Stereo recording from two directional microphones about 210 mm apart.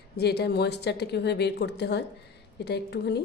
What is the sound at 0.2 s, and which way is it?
A woman's voice, 50° left (ahead or behind).